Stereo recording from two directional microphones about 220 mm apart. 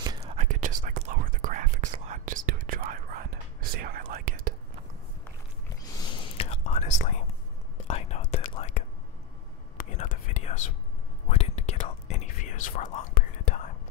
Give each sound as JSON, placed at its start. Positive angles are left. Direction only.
{"t": 0.2, "sound": "whispering", "side_deg": -30}
{"t": 5.9, "sound": "whispering", "side_deg": 20}